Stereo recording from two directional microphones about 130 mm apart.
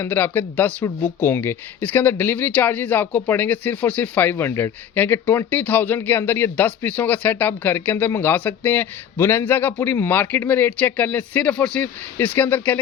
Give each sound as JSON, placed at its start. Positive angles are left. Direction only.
{"t": 0.0, "sound": "speech", "side_deg": 15}